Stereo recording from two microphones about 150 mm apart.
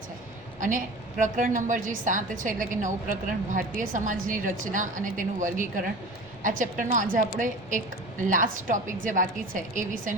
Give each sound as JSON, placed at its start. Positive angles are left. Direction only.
{"t": 1.2, "sound": "a woman's voice", "side_deg": -60}